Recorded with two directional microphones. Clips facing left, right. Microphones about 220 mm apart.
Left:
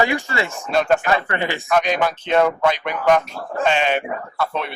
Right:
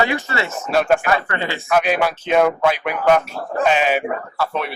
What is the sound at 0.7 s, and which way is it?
Speech, 5° right (ahead or behind).